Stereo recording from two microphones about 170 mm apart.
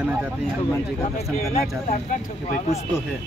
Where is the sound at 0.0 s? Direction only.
5° right (ahead or behind).